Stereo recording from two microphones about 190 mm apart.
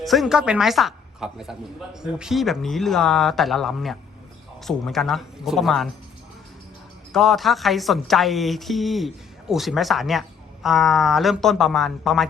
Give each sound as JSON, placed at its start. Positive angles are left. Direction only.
{"t": 0.0, "sound": "a woman's voice", "side_deg": 0}
{"t": 7.1, "sound": "a woman's voice", "side_deg": 0}